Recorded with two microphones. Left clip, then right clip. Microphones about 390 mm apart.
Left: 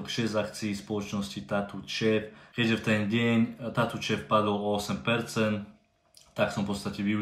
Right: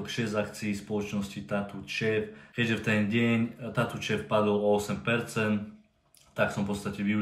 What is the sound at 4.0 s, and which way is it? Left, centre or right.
Speech, centre.